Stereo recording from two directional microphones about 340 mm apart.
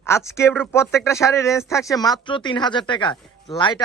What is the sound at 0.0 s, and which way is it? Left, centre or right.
A man's voice, centre.